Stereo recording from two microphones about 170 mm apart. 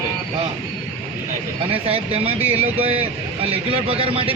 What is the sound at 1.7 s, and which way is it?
Speech, 35° right (ahead or behind).